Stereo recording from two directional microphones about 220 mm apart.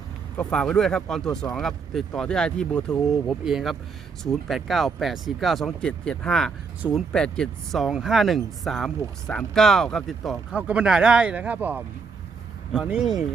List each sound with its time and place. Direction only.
0.3 s speech: 5° left (ahead or behind)